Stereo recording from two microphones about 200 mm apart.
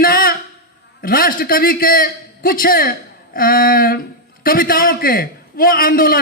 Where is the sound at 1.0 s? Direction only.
45° left (ahead or behind).